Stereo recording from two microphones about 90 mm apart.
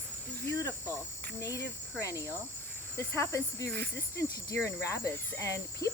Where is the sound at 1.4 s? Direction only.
35° left (ahead or behind).